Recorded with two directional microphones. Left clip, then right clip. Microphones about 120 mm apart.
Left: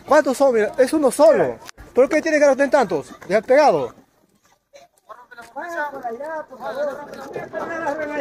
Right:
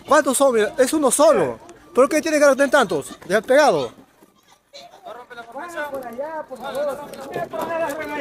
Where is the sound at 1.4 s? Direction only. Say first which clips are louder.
Left 2 dB; 25° right (ahead or behind).